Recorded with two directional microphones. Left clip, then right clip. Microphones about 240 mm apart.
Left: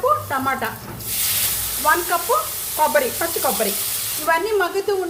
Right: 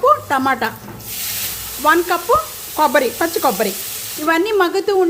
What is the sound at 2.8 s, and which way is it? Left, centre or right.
A woman's voice, right.